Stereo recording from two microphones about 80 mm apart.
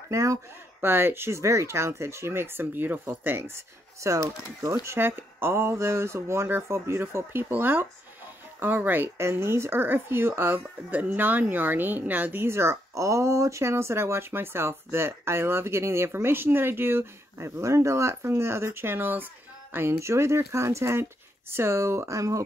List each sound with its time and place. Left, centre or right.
0.1 s speech: right
0.7 s speech: right
4.8 s speech: right